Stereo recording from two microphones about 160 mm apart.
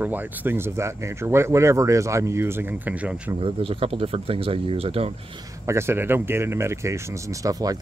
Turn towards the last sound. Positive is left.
turn(degrees=-20)  # may be behind; listen again after turning